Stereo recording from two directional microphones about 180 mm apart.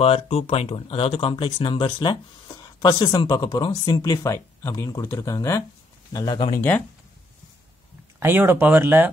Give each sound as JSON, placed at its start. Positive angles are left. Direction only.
{"t": 0.0, "sound": "speech", "side_deg": 35}
{"t": 8.2, "sound": "speech", "side_deg": -10}